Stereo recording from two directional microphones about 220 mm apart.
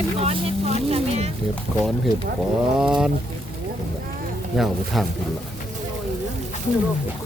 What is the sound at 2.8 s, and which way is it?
Speech, 5° right (ahead or behind).